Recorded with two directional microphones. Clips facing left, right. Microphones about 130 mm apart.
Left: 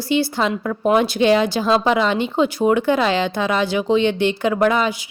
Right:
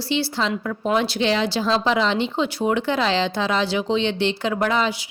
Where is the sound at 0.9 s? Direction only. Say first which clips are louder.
Left 5 dB; 50° left (ahead or behind).